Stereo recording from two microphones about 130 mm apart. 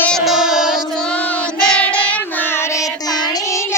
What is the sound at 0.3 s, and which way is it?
Child singing, 5° right (ahead or behind).